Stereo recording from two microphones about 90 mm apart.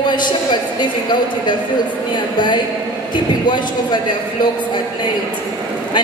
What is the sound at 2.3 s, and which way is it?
A man's voice, 55° left (ahead or behind).